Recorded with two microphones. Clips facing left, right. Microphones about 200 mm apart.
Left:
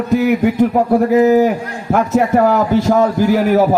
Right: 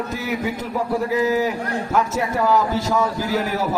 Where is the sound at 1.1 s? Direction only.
50° left (ahead or behind).